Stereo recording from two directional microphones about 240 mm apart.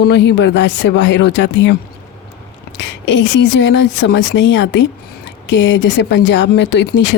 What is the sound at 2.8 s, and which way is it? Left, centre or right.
Speech, left.